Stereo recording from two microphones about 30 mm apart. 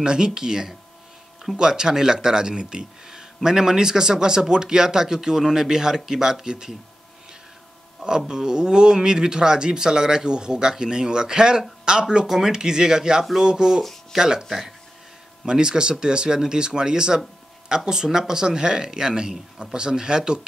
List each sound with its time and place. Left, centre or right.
0.0 s speech: right
8.3 s speech: centre
12.3 s speech: centre
15.4 s speech: right